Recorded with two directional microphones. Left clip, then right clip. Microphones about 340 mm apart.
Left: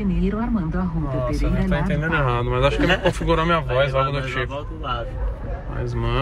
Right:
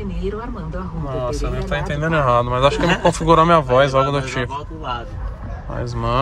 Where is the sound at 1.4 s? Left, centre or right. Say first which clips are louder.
Right 1 dB; centre.